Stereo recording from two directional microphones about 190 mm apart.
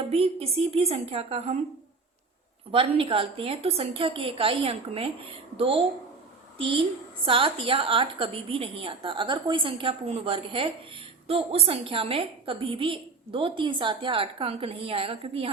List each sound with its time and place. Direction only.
0.0 s a woman's voice: 30° right (ahead or behind)
2.7 s a woman's voice: 30° right (ahead or behind)